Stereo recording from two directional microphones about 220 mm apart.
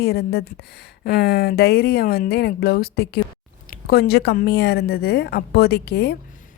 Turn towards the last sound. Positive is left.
turn(degrees=50)  # may be behind; listen again after turning